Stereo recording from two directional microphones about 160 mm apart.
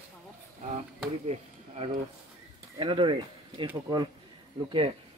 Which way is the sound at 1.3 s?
40° right (ahead or behind).